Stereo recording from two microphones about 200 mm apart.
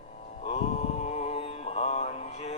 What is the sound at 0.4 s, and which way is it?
Mantra, 30° left (ahead or behind).